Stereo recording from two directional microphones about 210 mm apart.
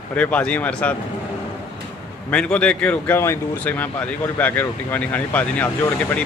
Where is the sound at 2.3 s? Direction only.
5° left (ahead or behind).